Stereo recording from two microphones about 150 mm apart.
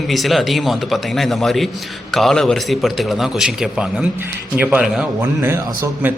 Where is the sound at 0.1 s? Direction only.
Centre (ahead or behind).